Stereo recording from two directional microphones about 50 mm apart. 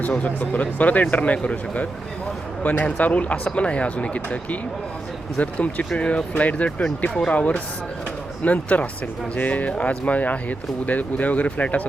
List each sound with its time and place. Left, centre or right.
0.2 s speech: left